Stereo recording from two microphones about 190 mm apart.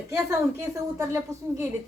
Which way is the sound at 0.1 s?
15° right (ahead or behind).